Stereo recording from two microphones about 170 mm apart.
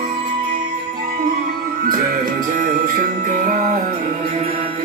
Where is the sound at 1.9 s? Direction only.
55° right (ahead or behind).